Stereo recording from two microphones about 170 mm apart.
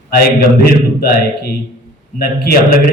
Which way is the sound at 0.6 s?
65° left (ahead or behind).